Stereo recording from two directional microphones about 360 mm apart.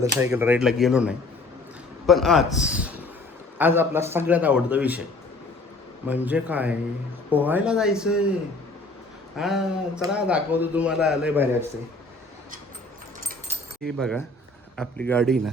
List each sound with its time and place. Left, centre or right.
0.2 s a man's voice: centre
6.1 s a man's voice: centre
9.4 s a man's voice: centre
13.8 s a man's voice: centre